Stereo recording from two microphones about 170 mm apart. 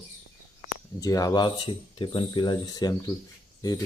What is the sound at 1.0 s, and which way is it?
Speech, 20° left (ahead or behind).